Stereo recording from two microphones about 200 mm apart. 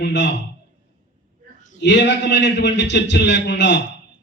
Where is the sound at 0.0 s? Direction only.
60° left (ahead or behind).